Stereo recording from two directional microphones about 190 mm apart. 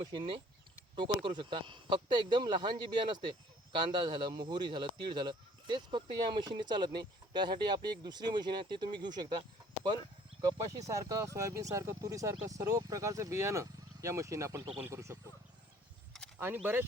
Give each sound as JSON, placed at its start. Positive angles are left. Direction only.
{"t": 0.1, "sound": "speech", "side_deg": -25}
{"t": 10.7, "sound": "speech", "side_deg": -15}